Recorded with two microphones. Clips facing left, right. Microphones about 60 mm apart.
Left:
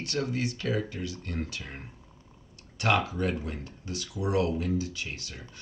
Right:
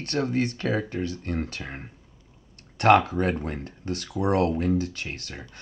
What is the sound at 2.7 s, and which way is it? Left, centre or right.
Speech, right.